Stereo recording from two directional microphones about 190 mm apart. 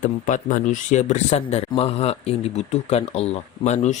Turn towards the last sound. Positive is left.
turn(degrees=35)  # may be behind; listen again after turning